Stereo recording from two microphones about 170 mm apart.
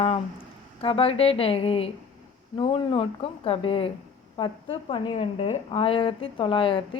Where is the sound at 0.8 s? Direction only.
35° left (ahead or behind).